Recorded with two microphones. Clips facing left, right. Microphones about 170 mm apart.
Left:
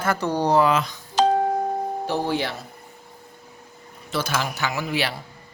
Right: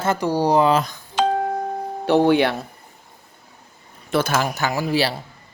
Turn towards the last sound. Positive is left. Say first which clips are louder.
# right 5 dB
turn(degrees=-35)  # may be behind; listen again after turning